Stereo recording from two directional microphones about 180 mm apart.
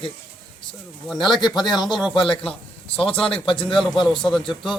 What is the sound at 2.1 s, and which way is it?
A man's voice, 30° left (ahead or behind).